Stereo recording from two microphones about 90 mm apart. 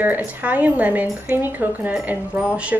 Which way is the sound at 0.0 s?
20° right (ahead or behind).